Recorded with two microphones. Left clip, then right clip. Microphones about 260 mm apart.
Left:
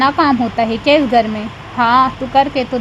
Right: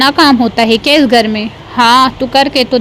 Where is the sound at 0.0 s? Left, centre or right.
Right.